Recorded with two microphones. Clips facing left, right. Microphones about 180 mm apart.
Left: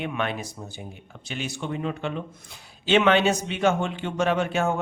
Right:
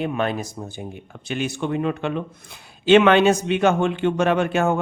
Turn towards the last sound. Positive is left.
turn(degrees=-60)  # may be behind; listen again after turning